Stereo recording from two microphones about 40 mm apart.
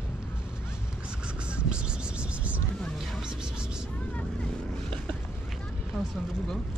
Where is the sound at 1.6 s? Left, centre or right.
Right.